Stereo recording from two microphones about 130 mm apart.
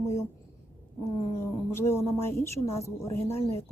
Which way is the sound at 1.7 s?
20° left (ahead or behind).